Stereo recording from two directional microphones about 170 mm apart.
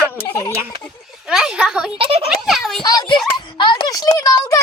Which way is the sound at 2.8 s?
25° left (ahead or behind).